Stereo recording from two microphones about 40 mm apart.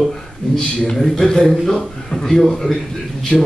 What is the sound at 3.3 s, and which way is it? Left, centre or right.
Speech, left.